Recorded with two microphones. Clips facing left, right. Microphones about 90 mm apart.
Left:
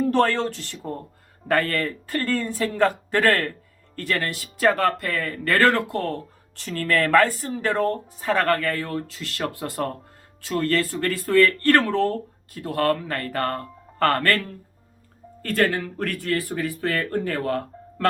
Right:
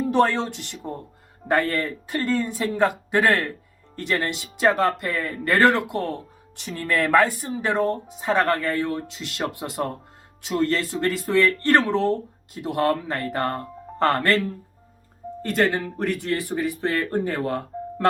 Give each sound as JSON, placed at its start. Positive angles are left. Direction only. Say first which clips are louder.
{"t": 0.1, "sound": "speech", "louder": "even", "side_deg": -15}